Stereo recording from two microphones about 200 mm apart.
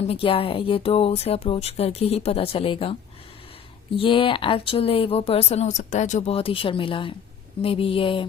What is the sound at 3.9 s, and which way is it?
A woman's voice, 25° left (ahead or behind).